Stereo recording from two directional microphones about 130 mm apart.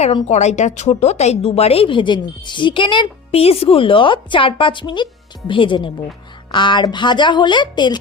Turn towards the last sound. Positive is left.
turn(degrees=35)  # may be behind; listen again after turning